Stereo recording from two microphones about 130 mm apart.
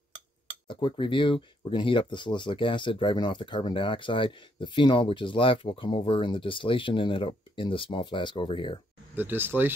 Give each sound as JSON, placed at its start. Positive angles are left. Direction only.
{"t": 0.7, "sound": "speech", "side_deg": 40}
{"t": 9.1, "sound": "speech", "side_deg": -15}